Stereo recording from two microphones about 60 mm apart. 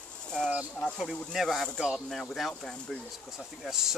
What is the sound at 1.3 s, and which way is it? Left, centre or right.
Speech, centre.